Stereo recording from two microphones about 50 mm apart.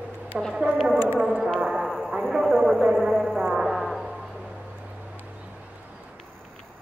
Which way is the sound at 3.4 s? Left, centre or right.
Centre.